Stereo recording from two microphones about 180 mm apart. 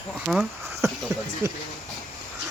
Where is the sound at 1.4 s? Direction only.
15° right (ahead or behind).